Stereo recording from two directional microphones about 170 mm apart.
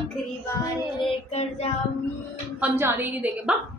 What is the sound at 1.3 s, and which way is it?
Child singing, 40° left (ahead or behind).